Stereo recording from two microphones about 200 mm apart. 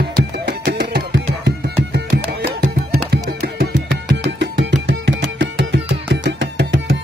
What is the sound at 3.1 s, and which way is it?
Music, 50° right (ahead or behind).